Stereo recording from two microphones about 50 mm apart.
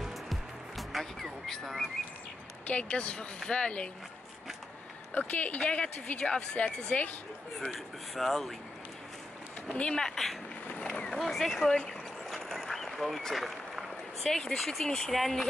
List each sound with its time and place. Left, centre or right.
0.0 s music: centre
2.6 s speech: left
5.1 s speech: left
7.6 s speech: centre
9.7 s speech: left
9.9 s speech: centre
12.3 s a sound: centre
14.5 s speech: centre